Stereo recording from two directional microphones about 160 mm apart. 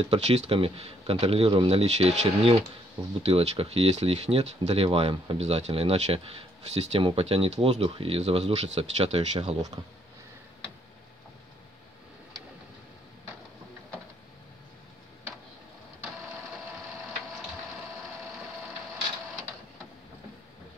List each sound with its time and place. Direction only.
0.0 s speech: 40° right (ahead or behind)